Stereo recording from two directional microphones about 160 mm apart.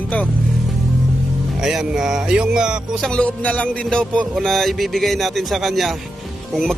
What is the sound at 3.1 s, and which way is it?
A man's voice, 10° left (ahead or behind).